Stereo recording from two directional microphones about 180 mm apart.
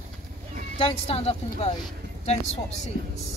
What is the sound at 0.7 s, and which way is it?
Speech, 30° left (ahead or behind).